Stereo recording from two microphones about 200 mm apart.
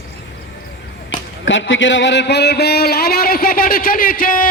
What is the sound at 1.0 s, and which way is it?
A man's voice, 70° left (ahead or behind).